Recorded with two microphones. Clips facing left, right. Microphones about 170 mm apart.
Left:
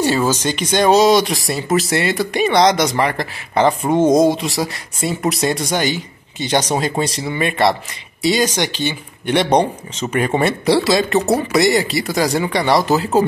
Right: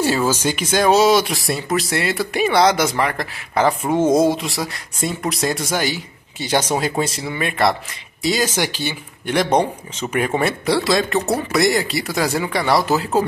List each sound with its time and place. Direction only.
0.3 s speech: 10° right (ahead or behind)
11.1 s speech: 20° left (ahead or behind)
11.5 s speech: centre (ahead or behind)